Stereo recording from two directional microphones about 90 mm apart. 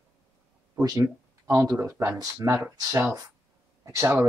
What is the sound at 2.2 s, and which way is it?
Speech, 40° right (ahead or behind).